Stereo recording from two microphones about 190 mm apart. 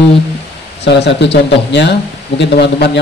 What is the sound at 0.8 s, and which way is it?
Speech, 65° left (ahead or behind).